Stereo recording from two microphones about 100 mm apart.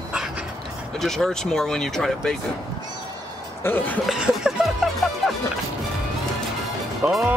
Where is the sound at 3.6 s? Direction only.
20° left (ahead or behind).